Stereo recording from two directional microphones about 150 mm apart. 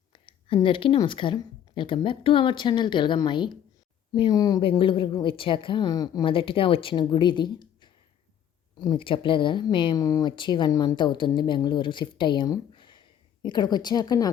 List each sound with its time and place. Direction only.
0.1 s speech: 35° left (ahead or behind)
4.6 s speech: 35° left (ahead or behind)